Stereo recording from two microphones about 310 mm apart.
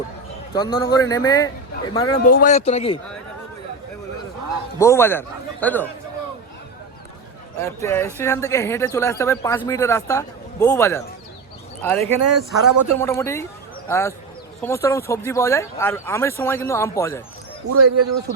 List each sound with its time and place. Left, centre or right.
0.5 s speech: centre
2.2 s speech: left
4.8 s speech: centre
7.6 s a man's voice: centre
17.8 s speech: right